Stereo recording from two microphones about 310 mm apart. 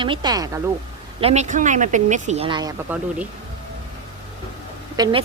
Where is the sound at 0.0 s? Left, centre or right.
Centre.